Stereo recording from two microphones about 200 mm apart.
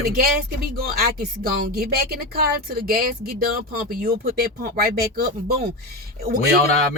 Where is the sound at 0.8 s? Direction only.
50° right (ahead or behind).